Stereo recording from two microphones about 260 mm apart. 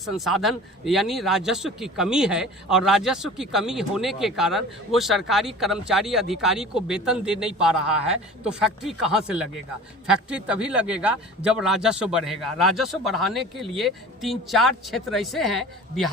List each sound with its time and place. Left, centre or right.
0.0 s speech: centre